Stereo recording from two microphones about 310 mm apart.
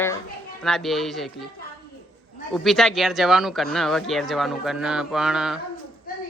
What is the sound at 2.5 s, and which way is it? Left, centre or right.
Speech, centre.